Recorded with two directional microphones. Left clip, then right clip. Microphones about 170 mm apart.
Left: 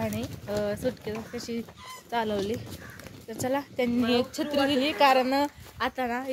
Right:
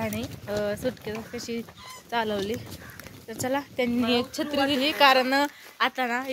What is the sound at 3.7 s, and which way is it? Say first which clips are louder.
A woman's voice: even; 30° right (ahead or behind).